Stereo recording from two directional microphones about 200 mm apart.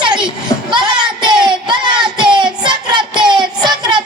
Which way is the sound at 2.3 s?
25° right (ahead or behind).